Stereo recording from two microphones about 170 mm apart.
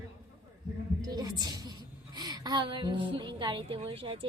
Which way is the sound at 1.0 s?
20° right (ahead or behind).